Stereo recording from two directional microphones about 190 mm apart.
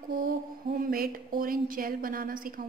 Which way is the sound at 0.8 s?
50° right (ahead or behind).